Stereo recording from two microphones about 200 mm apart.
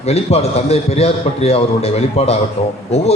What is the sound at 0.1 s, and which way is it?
A man's voice, 30° left (ahead or behind).